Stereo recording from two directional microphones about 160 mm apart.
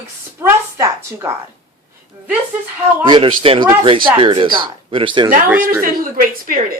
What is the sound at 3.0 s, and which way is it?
Speech, 30° right (ahead or behind).